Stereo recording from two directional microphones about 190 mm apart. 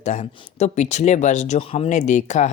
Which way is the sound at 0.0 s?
35° left (ahead or behind).